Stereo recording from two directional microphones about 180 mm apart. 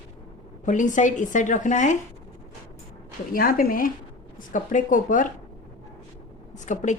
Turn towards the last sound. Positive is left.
turn(degrees=40)  # may be behind; listen again after turning